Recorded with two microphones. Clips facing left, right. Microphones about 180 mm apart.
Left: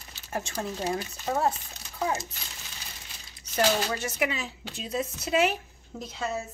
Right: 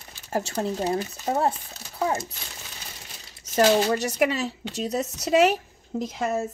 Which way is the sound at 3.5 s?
40° right (ahead or behind).